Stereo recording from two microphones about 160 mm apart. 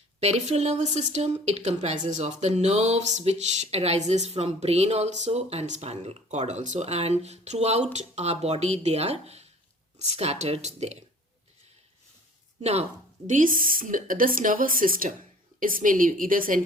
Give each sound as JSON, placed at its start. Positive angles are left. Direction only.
{"t": 0.2, "sound": "speech", "side_deg": -40}
{"t": 13.2, "sound": "speech", "side_deg": -55}